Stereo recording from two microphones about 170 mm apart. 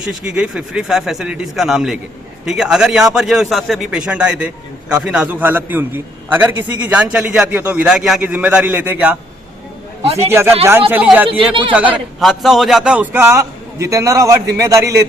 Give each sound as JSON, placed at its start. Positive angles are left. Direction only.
{"t": 0.0, "sound": "a man's voice", "side_deg": -5}
{"t": 10.2, "sound": "a man's voice", "side_deg": -15}